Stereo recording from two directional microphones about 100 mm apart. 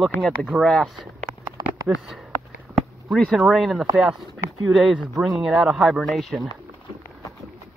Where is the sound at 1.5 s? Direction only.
35° right (ahead or behind).